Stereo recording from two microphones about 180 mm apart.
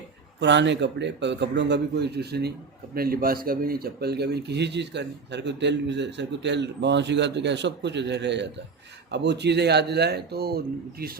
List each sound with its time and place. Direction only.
0.3 s speech: 75° right (ahead or behind); by 10.6 s 60° right (ahead or behind)